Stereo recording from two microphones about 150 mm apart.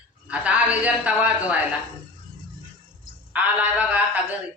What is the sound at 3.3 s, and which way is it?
Speech, 10° right (ahead or behind).